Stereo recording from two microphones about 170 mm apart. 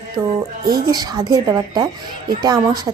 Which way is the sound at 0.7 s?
25° right (ahead or behind).